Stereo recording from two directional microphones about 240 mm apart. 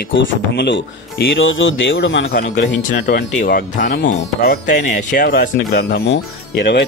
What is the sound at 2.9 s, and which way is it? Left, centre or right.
Speech, left.